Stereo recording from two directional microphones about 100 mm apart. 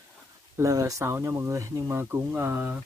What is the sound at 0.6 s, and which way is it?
Speech, 35° right (ahead or behind).